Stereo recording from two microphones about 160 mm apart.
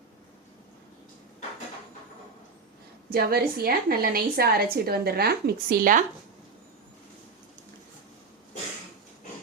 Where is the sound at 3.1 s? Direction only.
70° right (ahead or behind).